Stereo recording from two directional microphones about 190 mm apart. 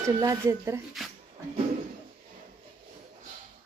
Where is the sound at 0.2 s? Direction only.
15° right (ahead or behind).